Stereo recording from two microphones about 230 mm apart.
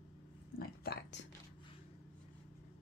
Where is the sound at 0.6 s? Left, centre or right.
Left.